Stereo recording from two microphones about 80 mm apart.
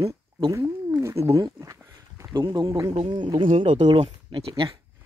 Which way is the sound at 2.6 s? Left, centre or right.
Right.